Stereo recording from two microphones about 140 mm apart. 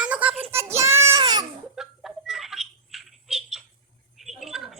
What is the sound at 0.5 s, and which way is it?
Child singing, 20° right (ahead or behind).